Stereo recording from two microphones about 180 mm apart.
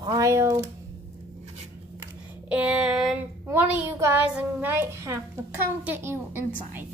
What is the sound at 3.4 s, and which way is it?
A child's voice, 10° right (ahead or behind).